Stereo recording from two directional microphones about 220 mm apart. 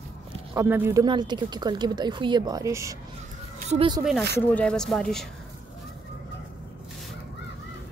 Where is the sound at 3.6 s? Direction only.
30° right (ahead or behind).